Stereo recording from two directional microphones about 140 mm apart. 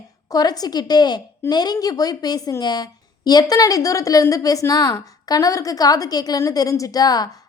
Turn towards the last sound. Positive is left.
turn(degrees=25)  # may be behind; listen again after turning